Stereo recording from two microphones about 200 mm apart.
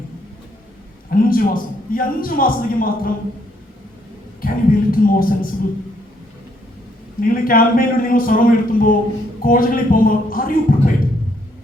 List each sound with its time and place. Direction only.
1.1 s a man's voice: 45° left (ahead or behind)
4.4 s a man's voice: 45° left (ahead or behind)
7.2 s a man's voice: 45° left (ahead or behind)